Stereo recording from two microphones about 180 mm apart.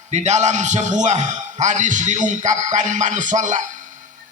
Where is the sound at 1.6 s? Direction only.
45° right (ahead or behind).